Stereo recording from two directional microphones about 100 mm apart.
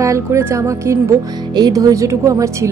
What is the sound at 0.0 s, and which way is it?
A woman's voice, 30° right (ahead or behind).